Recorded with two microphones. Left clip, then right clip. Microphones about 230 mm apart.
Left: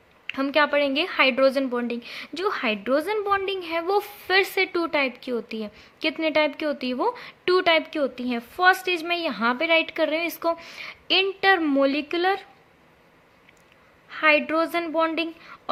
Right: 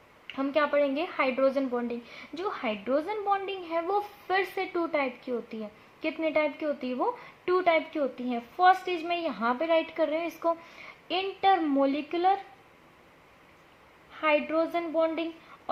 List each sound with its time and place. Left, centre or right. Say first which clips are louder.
0.3 s a woman's voice: left 5 dB; left
14.1 s a woman's voice: left 6 dB; left